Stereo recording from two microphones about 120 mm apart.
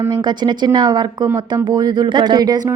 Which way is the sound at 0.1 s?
40° right (ahead or behind).